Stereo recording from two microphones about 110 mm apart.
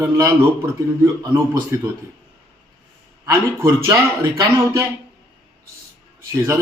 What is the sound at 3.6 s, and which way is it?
Speech, 25° right (ahead or behind).